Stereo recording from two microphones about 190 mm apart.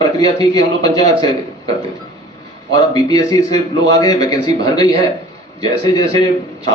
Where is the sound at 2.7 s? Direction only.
20° left (ahead or behind).